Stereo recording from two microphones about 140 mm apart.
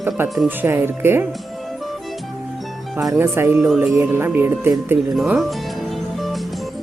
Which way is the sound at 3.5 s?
5° right (ahead or behind).